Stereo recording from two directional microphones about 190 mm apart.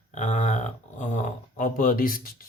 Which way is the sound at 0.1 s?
40° left (ahead or behind).